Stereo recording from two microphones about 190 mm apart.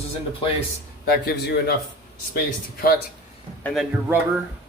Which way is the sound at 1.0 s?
55° left (ahead or behind).